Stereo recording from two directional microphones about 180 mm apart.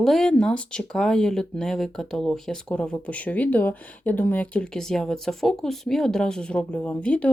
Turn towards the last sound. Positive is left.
turn(degrees=5)  # may be behind; listen again after turning